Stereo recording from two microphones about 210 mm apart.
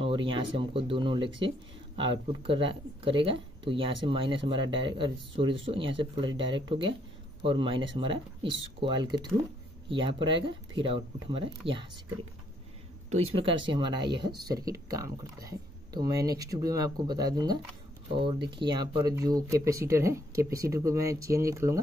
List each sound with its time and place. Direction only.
0.0 s a sound: 25° right (ahead or behind)
0.6 s speech: 25° right (ahead or behind)
13.1 s speech: 30° right (ahead or behind)